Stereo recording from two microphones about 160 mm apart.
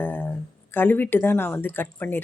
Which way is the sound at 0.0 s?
10° left (ahead or behind).